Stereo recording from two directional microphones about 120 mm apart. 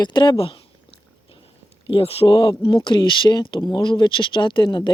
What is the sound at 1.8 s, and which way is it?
Speech, 50° left (ahead or behind).